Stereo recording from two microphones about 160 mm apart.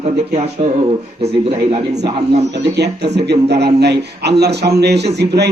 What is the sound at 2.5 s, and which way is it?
Speech, 90° right.